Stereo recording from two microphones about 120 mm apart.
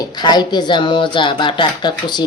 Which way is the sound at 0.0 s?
35° left (ahead or behind).